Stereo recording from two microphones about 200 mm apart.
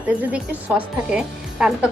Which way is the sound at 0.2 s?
5° right (ahead or behind).